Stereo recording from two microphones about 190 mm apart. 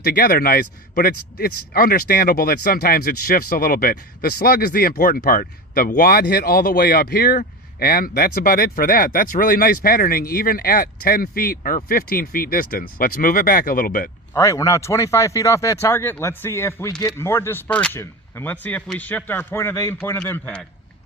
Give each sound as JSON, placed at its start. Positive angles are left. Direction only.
{"t": 0.0, "sound": "speech", "side_deg": 50}
{"t": 14.3, "sound": "speech", "side_deg": 15}